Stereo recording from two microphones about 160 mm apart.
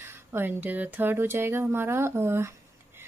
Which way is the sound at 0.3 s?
10° right (ahead or behind).